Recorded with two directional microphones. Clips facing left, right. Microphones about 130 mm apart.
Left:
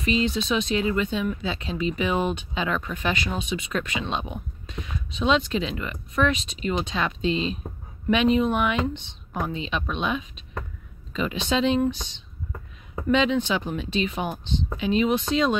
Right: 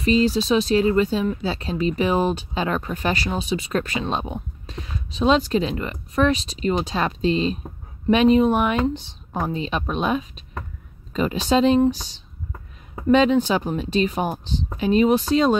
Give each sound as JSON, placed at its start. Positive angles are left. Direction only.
{"t": 0.0, "sound": "speech", "side_deg": -35}